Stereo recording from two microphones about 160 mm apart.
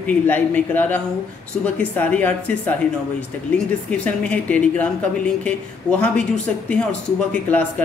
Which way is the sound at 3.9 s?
10° left (ahead or behind).